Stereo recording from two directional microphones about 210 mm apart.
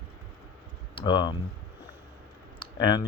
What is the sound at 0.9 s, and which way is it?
Speech, 20° left (ahead or behind).